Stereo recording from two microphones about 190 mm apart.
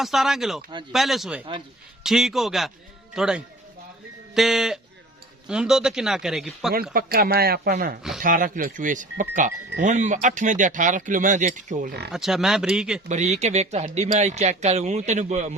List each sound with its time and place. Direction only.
0.0 s speech: centre (ahead or behind)
6.9 s speech: 50° right (ahead or behind)
12.1 s speech: centre (ahead or behind)
13.1 s speech: 35° right (ahead or behind)